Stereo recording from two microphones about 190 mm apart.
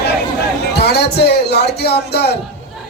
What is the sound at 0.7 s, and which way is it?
Speech, 60° left (ahead or behind).